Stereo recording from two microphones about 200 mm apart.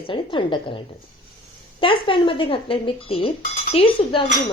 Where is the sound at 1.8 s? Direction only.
25° left (ahead or behind).